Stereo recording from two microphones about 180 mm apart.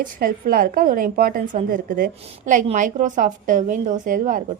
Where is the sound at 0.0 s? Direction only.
55° right (ahead or behind).